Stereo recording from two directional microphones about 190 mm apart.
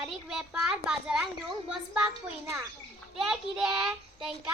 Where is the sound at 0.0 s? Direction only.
5° right (ahead or behind).